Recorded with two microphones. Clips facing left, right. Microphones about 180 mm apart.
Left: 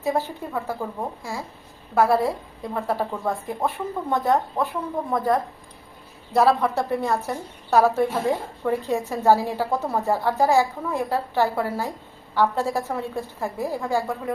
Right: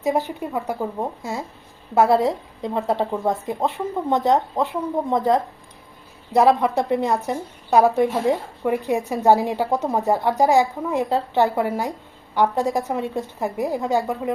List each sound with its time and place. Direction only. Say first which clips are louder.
0.0 s a woman's voice: right 3 dB; 15° right (ahead or behind)